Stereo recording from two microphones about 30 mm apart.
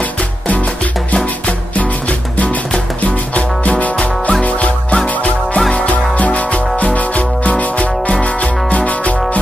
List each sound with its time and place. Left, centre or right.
1.8 s music: left